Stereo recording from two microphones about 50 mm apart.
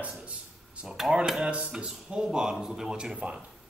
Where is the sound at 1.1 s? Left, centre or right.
Centre.